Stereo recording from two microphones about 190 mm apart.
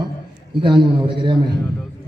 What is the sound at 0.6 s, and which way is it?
Speech, 25° right (ahead or behind).